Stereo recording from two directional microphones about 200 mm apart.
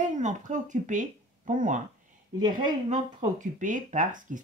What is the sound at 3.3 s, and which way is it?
Speech, 40° right (ahead or behind).